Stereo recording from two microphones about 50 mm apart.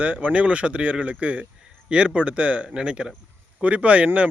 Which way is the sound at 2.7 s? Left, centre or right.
Centre.